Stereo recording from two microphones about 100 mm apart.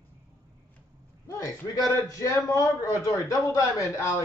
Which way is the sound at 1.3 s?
35° left (ahead or behind).